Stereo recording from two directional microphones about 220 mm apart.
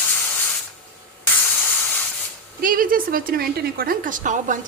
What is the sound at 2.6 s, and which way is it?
A woman's voice, 40° right (ahead or behind).